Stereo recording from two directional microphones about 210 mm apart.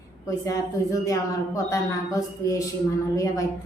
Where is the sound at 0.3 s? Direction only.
15° left (ahead or behind).